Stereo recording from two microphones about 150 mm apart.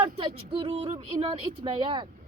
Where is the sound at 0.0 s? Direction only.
35° right (ahead or behind).